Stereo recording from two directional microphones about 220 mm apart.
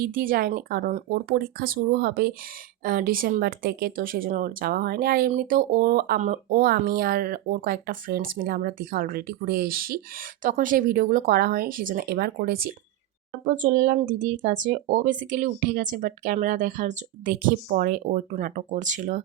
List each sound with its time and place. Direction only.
0.0 s speech: 40° right (ahead or behind)